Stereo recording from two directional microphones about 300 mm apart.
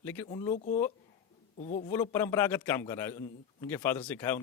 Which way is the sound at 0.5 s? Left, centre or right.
Left.